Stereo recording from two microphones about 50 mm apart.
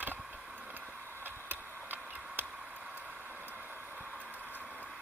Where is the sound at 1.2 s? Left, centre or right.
Right.